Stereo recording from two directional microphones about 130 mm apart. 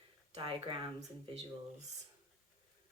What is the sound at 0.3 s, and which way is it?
Speech, 40° right (ahead or behind).